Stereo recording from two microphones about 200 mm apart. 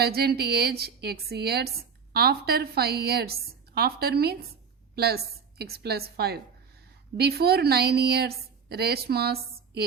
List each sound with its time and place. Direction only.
0.0 s a woman's voice: 50° right (ahead or behind)